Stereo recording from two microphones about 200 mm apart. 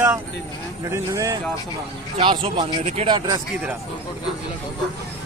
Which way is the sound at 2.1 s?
25° right (ahead or behind).